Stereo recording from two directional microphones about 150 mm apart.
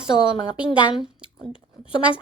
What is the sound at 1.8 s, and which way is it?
Speech, 10° right (ahead or behind).